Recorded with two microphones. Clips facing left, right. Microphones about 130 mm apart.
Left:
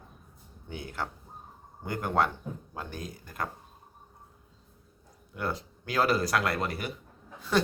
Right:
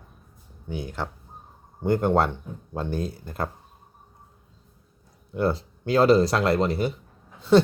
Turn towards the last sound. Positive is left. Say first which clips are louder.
# right 10 dB
turn(degrees=-25)  # may be behind; listen again after turning